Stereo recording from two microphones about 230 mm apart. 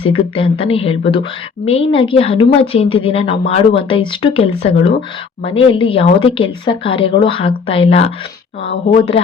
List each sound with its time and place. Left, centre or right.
0.0 s speech: left